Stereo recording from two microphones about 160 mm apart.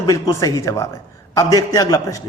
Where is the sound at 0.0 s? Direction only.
20° left (ahead or behind).